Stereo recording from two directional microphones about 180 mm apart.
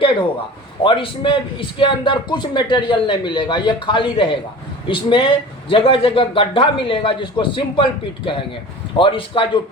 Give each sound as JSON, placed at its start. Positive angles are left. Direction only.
{"t": 0.8, "sound": "a man's voice", "side_deg": 30}